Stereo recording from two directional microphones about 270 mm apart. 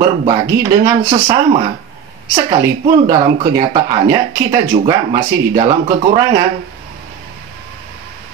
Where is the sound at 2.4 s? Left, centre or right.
Right.